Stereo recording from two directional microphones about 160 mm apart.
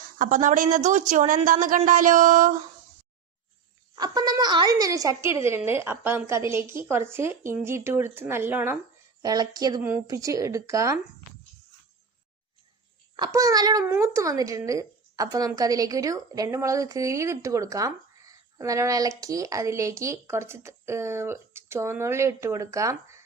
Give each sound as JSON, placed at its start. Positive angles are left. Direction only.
{"t": 0.2, "sound": "a woman's voice", "side_deg": -55}
{"t": 3.9, "sound": "a woman's voice", "side_deg": -25}
{"t": 9.2, "sound": "a woman's voice", "side_deg": -25}
{"t": 13.1, "sound": "a woman's voice", "side_deg": -25}